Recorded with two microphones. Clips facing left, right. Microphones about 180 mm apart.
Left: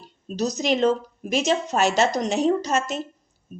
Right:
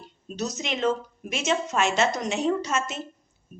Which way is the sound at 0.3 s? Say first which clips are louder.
Left 7 dB; 35° left (ahead or behind).